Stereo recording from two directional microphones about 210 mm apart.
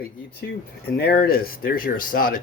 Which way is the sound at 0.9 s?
50° left (ahead or behind).